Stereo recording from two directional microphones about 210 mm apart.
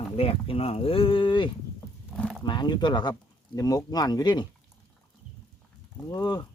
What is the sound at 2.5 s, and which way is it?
Speech, 20° left (ahead or behind).